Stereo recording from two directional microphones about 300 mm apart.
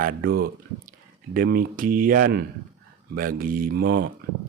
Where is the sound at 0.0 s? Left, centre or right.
Right.